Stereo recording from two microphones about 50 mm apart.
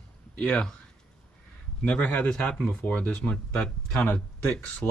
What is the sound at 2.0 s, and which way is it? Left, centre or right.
Speech, left.